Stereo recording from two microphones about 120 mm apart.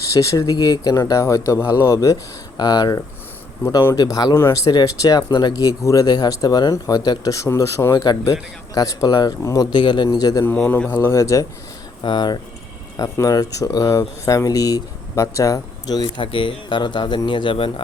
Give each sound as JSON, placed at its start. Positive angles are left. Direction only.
{"t": 0.0, "sound": "speech", "side_deg": 25}
{"t": 9.7, "sound": "speech", "side_deg": 40}
{"t": 10.7, "sound": "speech", "side_deg": 15}
{"t": 12.0, "sound": "speech", "side_deg": 40}